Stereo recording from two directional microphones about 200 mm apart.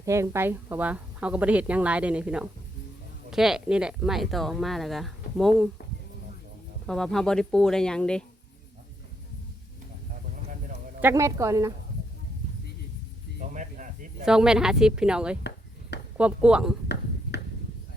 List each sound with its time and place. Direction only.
0.0 s speech: 15° right (ahead or behind); by 5.6 s centre (ahead or behind)
6.8 s speech: 5° left (ahead or behind)
11.0 s speech: 15° right (ahead or behind)
13.5 s snake: 40° right (ahead or behind)
14.3 s speech: 5° right (ahead or behind)
17.3 s a sound: 55° left (ahead or behind)